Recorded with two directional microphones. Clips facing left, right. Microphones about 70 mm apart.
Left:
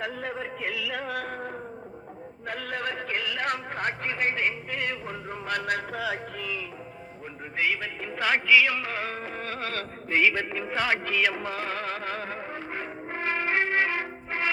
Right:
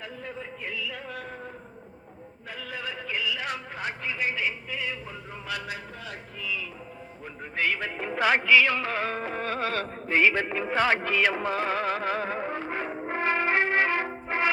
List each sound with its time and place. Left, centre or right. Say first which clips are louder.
0.0 s a sound: left 6 dB; left
2.5 s a man's voice: left 5 dB; left
6.4 s a man's voice: even; left
7.5 s music: even; centre
10.1 s speech: right 1 dB; right
11.7 s music: right 4 dB; centre
13.1 s brass instrument: right 3 dB; centre
14.3 s music: right 3 dB; centre